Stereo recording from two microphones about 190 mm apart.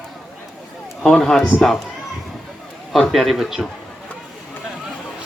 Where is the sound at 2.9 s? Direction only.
Centre (ahead or behind).